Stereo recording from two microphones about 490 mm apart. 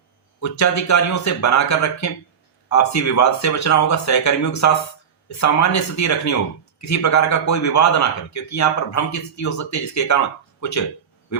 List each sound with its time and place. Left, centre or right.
0.3 s a man's voice: left